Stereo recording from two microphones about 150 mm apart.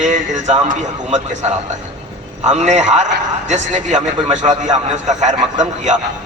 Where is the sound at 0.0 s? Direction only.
50° right (ahead or behind).